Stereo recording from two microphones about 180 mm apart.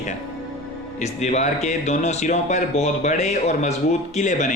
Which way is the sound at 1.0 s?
40° left (ahead or behind).